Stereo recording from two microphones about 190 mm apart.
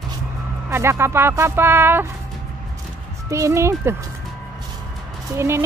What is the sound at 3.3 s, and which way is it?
Speech, 15° right (ahead or behind).